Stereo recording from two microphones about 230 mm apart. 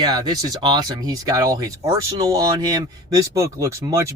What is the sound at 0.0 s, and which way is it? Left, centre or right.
Speech, centre.